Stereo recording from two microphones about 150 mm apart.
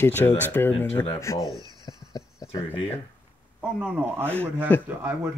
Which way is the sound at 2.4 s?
25° left (ahead or behind).